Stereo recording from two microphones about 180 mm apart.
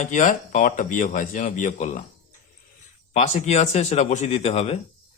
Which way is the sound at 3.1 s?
40° left (ahead or behind).